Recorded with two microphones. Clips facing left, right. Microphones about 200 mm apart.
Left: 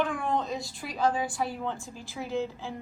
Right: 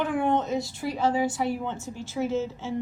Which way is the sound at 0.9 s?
25° right (ahead or behind).